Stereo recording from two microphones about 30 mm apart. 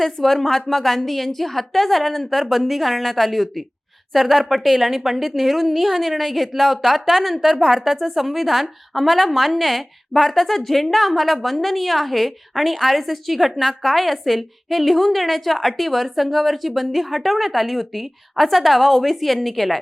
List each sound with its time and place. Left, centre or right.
0.0 s a woman's voice: centre